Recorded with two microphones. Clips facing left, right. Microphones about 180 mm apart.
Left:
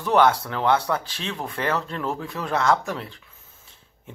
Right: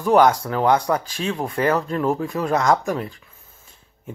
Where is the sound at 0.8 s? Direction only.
15° right (ahead or behind).